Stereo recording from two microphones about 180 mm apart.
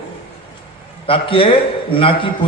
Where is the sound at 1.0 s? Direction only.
30° left (ahead or behind).